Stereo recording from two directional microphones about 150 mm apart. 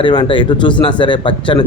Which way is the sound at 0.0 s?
35° left (ahead or behind).